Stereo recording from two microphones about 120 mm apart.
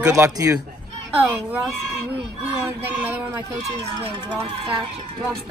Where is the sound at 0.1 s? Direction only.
30° right (ahead or behind).